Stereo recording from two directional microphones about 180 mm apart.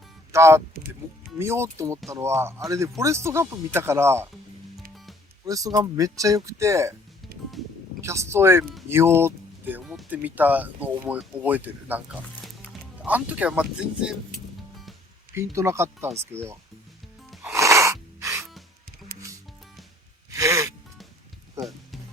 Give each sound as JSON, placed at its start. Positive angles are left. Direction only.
{"t": 0.3, "sound": "speech", "side_deg": -15}
{"t": 5.5, "sound": "speech", "side_deg": -20}
{"t": 8.0, "sound": "speech", "side_deg": -15}
{"t": 15.5, "sound": "speech", "side_deg": -15}
{"t": 17.5, "sound": "gasp", "side_deg": -15}
{"t": 20.3, "sound": "gasp", "side_deg": -15}